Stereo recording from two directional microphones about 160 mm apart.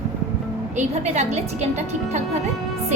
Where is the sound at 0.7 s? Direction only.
45° right (ahead or behind).